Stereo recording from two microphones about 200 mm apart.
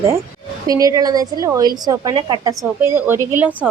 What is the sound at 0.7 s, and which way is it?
A woman's voice, 20° right (ahead or behind).